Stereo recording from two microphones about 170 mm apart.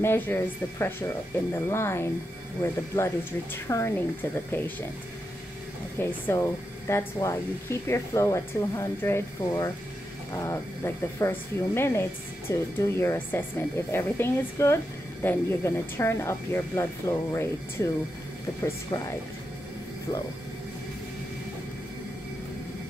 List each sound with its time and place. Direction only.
0.0 s speech: 15° left (ahead or behind)
3.6 s speech: 15° left (ahead or behind)
5.9 s speech: 15° left (ahead or behind)
18.9 s speech: 20° left (ahead or behind)